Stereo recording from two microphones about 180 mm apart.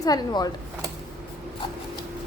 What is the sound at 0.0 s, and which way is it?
Speech, 20° left (ahead or behind).